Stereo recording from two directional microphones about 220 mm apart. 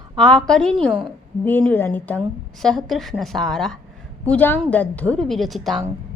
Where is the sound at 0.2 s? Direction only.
5° left (ahead or behind).